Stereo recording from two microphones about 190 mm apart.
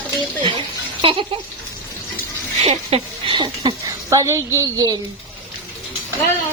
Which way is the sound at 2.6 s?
30° right (ahead or behind).